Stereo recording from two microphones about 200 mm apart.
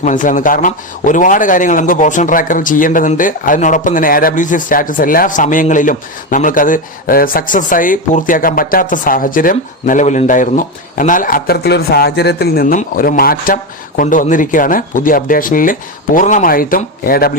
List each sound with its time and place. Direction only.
0.0 s a man's voice: 40° left (ahead or behind)